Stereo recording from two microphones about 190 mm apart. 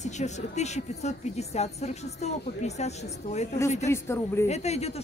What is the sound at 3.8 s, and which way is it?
Speech, 15° left (ahead or behind).